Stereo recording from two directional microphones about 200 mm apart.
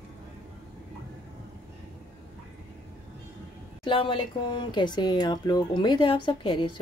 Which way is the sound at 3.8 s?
25° left (ahead or behind).